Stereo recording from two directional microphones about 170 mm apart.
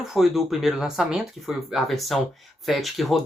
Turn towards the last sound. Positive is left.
turn(degrees=0)  # may be behind; listen again after turning